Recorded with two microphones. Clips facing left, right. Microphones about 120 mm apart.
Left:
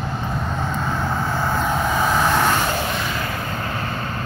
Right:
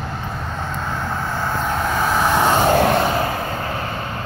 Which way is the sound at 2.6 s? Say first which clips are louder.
Right 8 dB; 55° right (ahead or behind).